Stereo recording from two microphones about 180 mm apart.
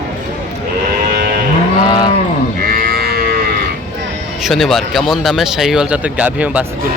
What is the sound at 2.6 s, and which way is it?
Livestock, 55° right (ahead or behind).